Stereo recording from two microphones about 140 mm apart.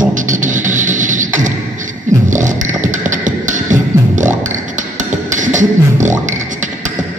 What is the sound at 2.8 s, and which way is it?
Music, 65° right (ahead or behind).